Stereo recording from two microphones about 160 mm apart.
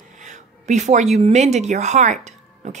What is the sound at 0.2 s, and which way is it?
A woman's voice, 50° right (ahead or behind).